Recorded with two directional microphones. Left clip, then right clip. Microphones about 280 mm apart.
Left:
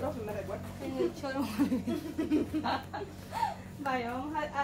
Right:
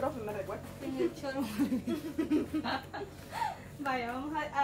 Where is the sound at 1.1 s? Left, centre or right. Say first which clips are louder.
Left 2 dB; left.